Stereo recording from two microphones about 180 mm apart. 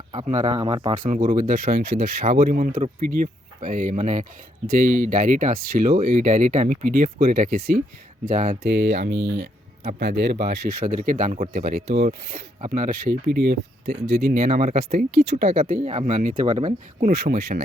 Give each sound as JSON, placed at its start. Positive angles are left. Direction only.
{"t": 0.3, "sound": "speech", "side_deg": -40}
{"t": 0.5, "sound": "speech", "side_deg": -30}
{"t": 0.9, "sound": "speech", "side_deg": -45}
{"t": 8.6, "sound": "speech", "side_deg": -70}
{"t": 16.5, "sound": "speech", "side_deg": -25}
{"t": 17.0, "sound": "speech", "side_deg": -60}